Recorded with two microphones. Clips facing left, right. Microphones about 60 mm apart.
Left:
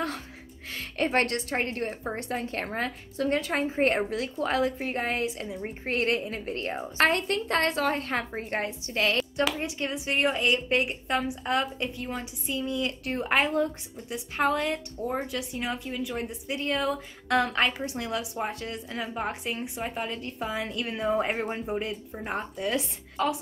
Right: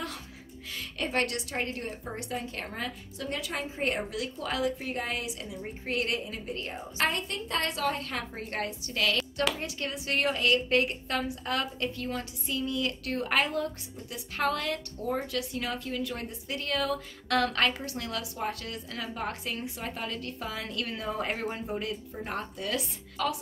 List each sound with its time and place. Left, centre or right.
0.7 s a woman's voice: left